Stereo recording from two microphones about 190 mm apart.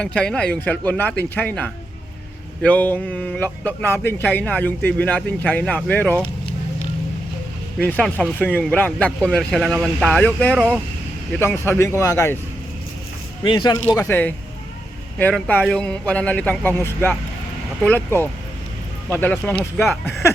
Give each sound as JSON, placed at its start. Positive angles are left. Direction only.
{"t": 0.0, "sound": "speech", "side_deg": 5}
{"t": 7.8, "sound": "speech", "side_deg": 5}
{"t": 13.4, "sound": "speech", "side_deg": 25}
{"t": 13.8, "sound": "speech", "side_deg": 15}